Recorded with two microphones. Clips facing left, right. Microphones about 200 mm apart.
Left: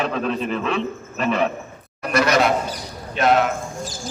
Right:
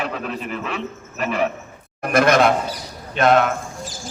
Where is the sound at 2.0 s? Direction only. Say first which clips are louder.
Right 2 dB; 50° right (ahead or behind).